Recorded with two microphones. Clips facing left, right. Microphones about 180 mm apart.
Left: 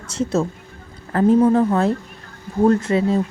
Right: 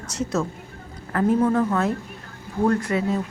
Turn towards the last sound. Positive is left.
turn(degrees=30)  # may be behind; listen again after turning